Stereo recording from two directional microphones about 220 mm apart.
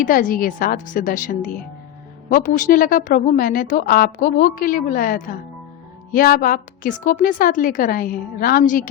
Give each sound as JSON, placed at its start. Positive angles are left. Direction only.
{"t": 0.0, "sound": "a woman's voice", "side_deg": 40}